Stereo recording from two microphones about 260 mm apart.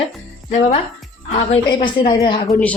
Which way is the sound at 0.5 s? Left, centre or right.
Left.